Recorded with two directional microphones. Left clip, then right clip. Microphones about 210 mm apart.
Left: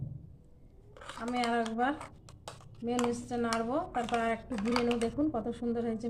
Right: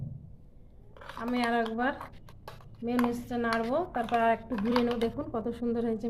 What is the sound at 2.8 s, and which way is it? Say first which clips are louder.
A woman's voice: right 2 dB; 45° right (ahead or behind).